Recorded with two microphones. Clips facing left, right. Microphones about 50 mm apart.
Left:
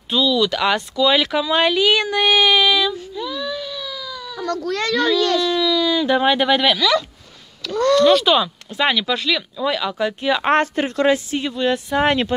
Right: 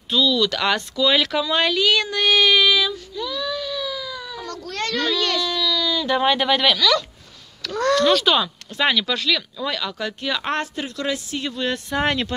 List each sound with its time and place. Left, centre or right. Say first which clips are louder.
0.1 s speech: left 2 dB; centre
2.9 s baby cry: left 2 dB; centre
5.1 s baby cry: left 5 dB; centre
6.0 s speech: even; centre
10.5 s speech: left 8 dB; left
11.4 s speech: left 3 dB; centre